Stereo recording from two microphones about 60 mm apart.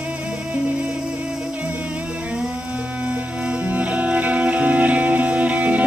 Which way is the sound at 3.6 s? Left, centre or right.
Right.